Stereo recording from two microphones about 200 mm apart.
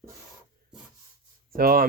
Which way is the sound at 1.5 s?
45° right (ahead or behind).